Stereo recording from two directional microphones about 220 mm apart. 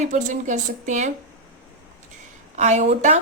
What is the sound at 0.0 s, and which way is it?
Speech, 35° right (ahead or behind).